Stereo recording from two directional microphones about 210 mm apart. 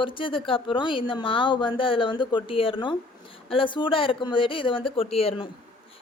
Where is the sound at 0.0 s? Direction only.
25° left (ahead or behind).